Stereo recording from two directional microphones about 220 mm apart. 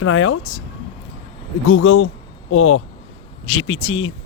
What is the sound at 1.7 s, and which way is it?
A man's voice, 65° left (ahead or behind).